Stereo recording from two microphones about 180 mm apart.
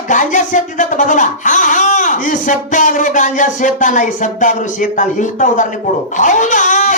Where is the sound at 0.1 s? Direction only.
45° left (ahead or behind).